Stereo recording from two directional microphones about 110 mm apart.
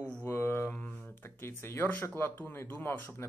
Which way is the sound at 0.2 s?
20° left (ahead or behind).